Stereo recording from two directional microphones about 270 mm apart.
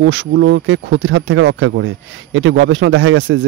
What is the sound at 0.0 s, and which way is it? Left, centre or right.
Speech, right.